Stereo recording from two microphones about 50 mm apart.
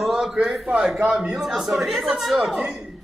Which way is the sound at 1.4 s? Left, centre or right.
Centre.